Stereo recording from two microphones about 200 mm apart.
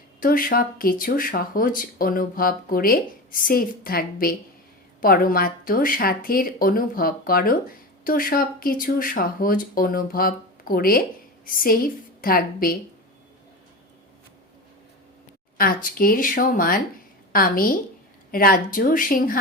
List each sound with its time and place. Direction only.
0.2 s speech: 45° left (ahead or behind)
15.5 s speech: 45° left (ahead or behind)